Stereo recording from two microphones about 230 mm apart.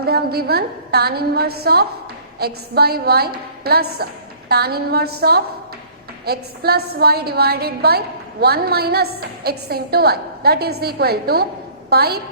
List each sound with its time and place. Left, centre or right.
0.0 s a woman's voice: right